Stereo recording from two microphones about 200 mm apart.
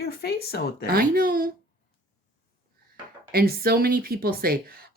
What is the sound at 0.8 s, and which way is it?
Speech, 45° right (ahead or behind).